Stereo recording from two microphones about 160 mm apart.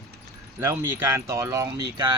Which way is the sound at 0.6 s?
15° right (ahead or behind).